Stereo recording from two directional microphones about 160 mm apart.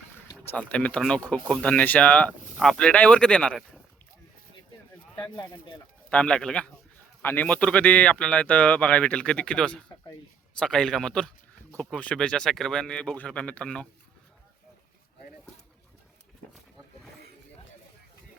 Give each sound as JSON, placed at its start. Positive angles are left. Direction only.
{"t": 0.5, "sound": "a man's voice", "side_deg": 10}
{"t": 5.1, "sound": "speech", "side_deg": 25}
{"t": 6.1, "sound": "a man's voice", "side_deg": 5}